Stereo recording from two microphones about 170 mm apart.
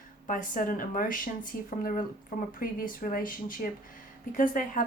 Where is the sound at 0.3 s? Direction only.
50° left (ahead or behind).